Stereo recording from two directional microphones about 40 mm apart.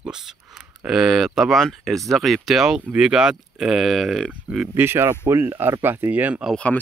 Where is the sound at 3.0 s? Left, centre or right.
Centre.